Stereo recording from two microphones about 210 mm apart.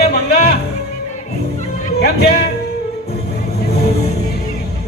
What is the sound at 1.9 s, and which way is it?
Music, 50° left (ahead or behind).